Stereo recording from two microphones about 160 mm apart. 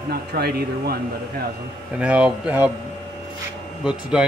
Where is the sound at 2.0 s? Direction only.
5° right (ahead or behind).